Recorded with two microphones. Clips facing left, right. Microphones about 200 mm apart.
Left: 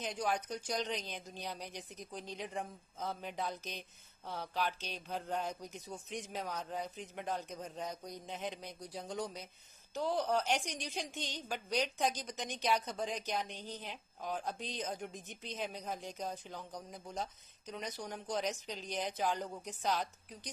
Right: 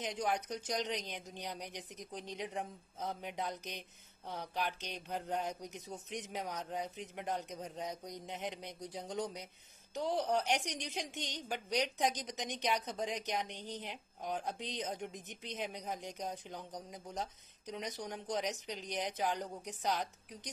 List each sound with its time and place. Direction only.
0.0 s a woman's voice: 15° right (ahead or behind)